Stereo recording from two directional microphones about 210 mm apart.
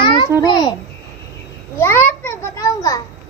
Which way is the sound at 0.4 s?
20° left (ahead or behind).